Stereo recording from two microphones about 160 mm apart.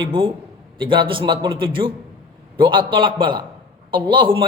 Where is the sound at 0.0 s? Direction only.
30° right (ahead or behind).